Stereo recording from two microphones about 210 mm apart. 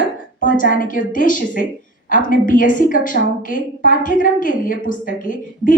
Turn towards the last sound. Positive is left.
turn(degrees=40)  # may be behind; listen again after turning